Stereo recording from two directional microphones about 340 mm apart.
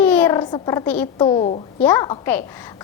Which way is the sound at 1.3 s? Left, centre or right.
Centre.